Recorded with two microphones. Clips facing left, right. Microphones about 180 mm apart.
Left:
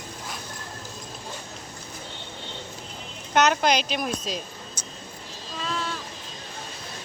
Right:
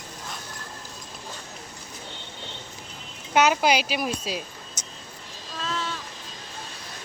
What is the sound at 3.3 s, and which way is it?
A woman's voice, 5° right (ahead or behind).